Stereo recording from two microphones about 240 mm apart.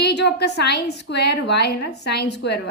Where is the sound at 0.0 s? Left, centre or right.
Left.